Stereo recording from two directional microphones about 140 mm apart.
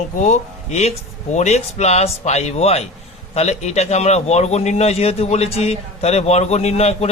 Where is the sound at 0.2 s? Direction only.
55° left (ahead or behind).